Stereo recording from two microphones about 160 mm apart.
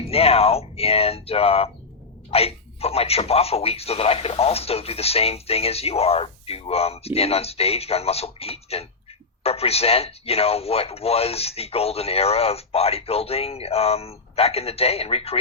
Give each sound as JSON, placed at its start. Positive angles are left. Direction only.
{"t": 0.1, "sound": "a man's voice", "side_deg": 40}